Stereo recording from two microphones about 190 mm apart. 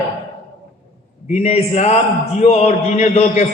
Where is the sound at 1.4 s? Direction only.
35° left (ahead or behind).